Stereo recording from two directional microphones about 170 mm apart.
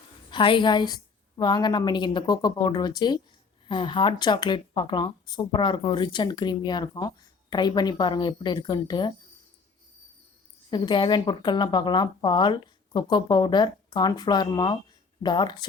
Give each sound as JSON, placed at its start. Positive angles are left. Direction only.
{"t": 0.3, "sound": "speech", "side_deg": 30}
{"t": 10.7, "sound": "speech", "side_deg": 25}